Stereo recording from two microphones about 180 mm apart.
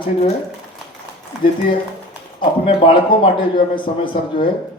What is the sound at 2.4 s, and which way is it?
A man's voice, 30° left (ahead or behind).